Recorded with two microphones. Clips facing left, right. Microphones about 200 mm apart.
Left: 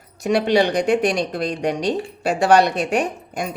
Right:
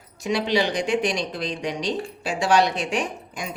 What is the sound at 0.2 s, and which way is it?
Speech, 60° left (ahead or behind).